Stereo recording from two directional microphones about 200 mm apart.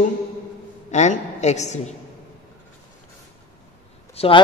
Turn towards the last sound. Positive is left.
turn(degrees=25)  # may be behind; listen again after turning